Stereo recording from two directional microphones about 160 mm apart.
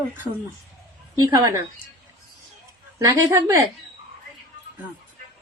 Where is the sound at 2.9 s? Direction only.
20° right (ahead or behind).